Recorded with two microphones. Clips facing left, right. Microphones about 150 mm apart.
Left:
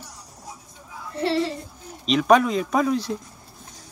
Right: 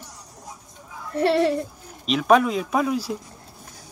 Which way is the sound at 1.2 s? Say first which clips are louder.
Right 4 dB; 60° right (ahead or behind).